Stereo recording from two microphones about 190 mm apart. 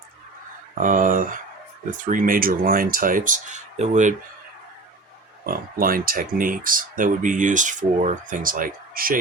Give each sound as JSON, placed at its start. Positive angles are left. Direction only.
{"t": 0.8, "sound": "speech", "side_deg": -45}
{"t": 5.7, "sound": "speech", "side_deg": -50}